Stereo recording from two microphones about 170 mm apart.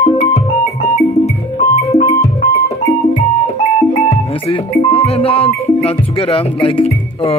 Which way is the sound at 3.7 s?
35° left (ahead or behind).